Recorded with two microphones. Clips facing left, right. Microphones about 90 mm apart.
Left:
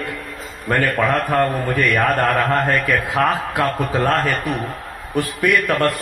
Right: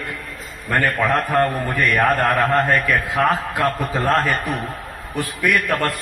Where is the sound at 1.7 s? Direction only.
60° left (ahead or behind).